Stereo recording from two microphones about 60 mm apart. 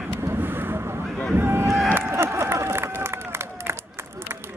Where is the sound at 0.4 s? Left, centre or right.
Right.